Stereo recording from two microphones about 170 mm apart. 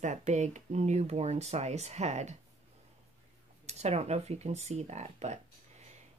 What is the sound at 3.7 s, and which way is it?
A woman's voice, 40° right (ahead or behind).